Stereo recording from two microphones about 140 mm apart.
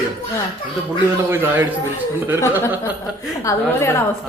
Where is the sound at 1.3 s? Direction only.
15° right (ahead or behind).